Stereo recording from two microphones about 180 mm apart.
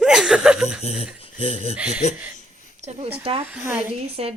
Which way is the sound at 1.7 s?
5° right (ahead or behind).